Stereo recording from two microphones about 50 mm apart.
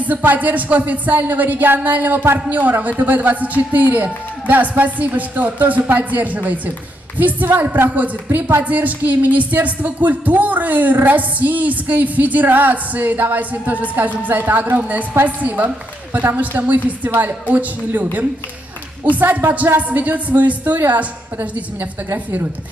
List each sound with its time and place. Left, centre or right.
0.0 s a man's voice: right